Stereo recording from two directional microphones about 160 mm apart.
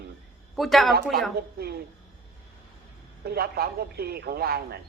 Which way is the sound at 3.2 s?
75° right (ahead or behind).